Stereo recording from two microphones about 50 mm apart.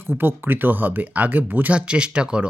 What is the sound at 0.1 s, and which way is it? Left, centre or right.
Speech, right.